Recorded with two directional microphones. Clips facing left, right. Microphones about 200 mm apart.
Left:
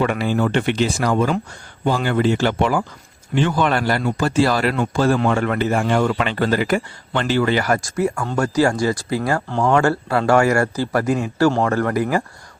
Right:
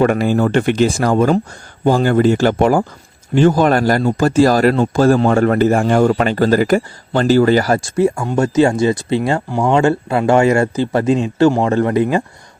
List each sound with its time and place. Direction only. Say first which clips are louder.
0.0 s a man's voice: right 5 dB; 45° right (ahead or behind); by 9.4 s 25° right (ahead or behind)
9.5 s speech: right 3 dB; 15° right (ahead or behind)